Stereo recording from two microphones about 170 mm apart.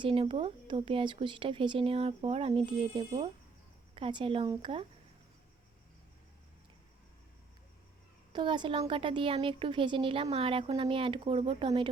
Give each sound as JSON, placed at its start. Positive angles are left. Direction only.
{"t": 0.0, "sound": "speech", "side_deg": -30}
{"t": 8.3, "sound": "speech", "side_deg": -25}